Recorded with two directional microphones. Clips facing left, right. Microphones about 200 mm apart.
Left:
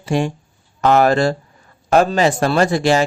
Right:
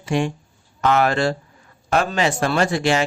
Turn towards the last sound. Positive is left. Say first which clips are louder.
# left 4 dB
turn(degrees=35)  # may be behind; listen again after turning